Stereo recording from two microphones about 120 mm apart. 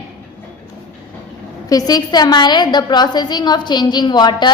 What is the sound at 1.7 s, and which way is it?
A child's voice, 35° left (ahead or behind).